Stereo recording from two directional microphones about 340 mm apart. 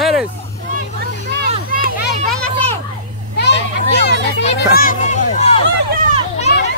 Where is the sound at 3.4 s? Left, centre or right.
Left.